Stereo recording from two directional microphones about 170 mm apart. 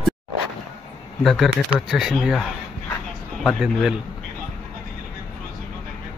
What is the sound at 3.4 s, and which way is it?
Speech, 5° right (ahead or behind).